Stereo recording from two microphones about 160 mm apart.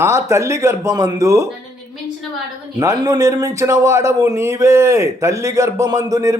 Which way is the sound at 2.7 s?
20° right (ahead or behind).